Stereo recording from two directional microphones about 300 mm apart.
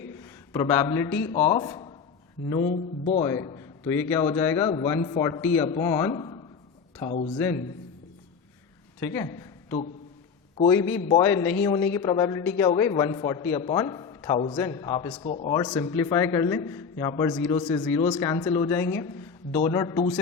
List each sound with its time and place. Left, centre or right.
0.2 s a man's voice: centre
9.0 s a man's voice: centre
11.2 s a man's voice: centre